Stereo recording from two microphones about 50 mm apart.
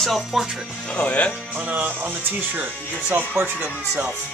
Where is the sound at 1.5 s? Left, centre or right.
Right.